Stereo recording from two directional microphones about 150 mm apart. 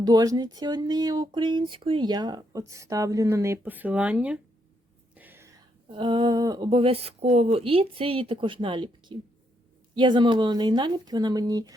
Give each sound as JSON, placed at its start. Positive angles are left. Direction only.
{"t": 0.0, "sound": "speech", "side_deg": -25}
{"t": 5.1, "sound": "a sound", "side_deg": -15}
{"t": 5.9, "sound": "speech", "side_deg": -35}